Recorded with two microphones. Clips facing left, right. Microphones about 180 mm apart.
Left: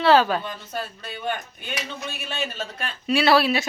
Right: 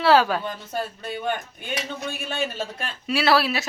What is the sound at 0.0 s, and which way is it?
Speech, 5° right (ahead or behind).